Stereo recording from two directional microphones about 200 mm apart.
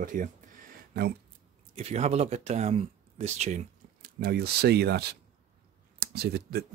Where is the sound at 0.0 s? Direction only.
40° right (ahead or behind).